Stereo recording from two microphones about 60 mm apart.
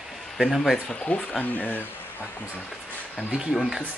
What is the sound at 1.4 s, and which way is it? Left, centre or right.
Speech, left.